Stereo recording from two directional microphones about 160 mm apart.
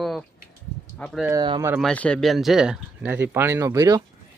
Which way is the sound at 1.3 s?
25° right (ahead or behind).